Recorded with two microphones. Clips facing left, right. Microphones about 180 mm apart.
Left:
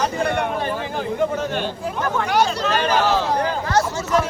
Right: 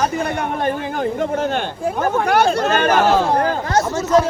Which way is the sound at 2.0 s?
55° right (ahead or behind).